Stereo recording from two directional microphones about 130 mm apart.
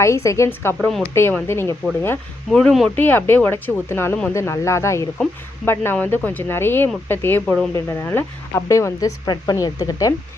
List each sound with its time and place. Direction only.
0.0 s speech: 25° left (ahead or behind)
0.8 s speech: 5° left (ahead or behind)
1.1 s speech: 20° left (ahead or behind)
2.5 s speech: 5° left (ahead or behind)
2.9 s speech: 15° left (ahead or behind)